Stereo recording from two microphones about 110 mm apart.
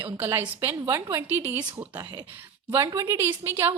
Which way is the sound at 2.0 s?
40° right (ahead or behind).